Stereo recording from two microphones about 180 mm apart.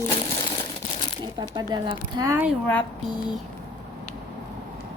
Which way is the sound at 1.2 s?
25° right (ahead or behind).